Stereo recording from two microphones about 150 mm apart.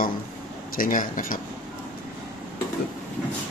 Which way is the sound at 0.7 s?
65° left (ahead or behind).